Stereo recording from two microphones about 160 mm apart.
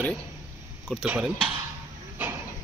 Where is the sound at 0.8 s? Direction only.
5° right (ahead or behind).